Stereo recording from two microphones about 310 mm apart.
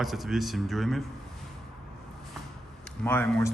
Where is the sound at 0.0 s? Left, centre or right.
Centre.